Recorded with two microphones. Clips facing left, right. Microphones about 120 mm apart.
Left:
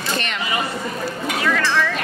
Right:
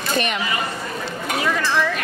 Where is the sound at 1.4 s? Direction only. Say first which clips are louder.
Left 1 dB; 15° right (ahead or behind).